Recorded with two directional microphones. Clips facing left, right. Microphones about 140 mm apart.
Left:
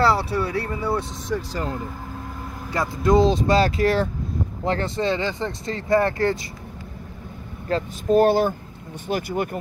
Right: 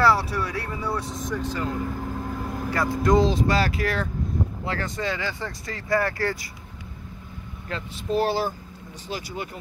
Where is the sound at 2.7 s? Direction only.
25° left (ahead or behind).